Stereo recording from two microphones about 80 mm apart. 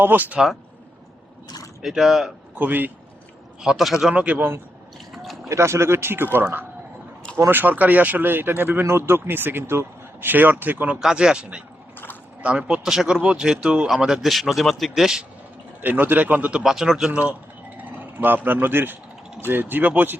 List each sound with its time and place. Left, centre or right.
0.0 s speech: right
1.5 s mechanisms: left
1.8 s speech: centre
2.6 s speech: right
3.6 s a man's voice: centre
4.1 s speech: centre
5.1 s a sound: centre
5.5 s speech: right
11.0 s speech: centre
15.8 s speech: right; by 17.1 s centre
17.1 s speech: centre